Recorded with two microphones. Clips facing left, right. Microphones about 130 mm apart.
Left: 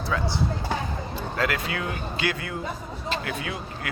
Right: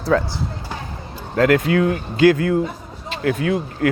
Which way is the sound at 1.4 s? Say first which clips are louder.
Right 13 dB; 50° right (ahead or behind).